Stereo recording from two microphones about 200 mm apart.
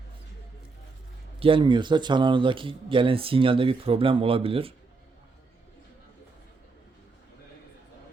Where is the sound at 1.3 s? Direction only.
25° right (ahead or behind).